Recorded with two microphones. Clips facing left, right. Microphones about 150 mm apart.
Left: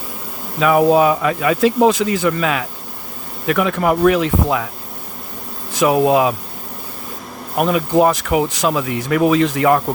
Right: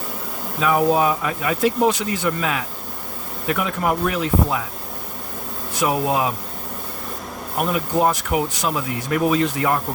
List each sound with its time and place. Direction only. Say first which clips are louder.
0.6 s speech: left 5 dB; 90° left
5.7 s speech: left 7 dB; 90° left
7.6 s speech: left 5 dB; 90° left